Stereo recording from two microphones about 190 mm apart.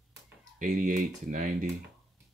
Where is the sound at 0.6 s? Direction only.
45° right (ahead or behind).